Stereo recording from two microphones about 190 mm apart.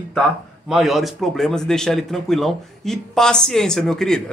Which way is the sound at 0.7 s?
Centre (ahead or behind).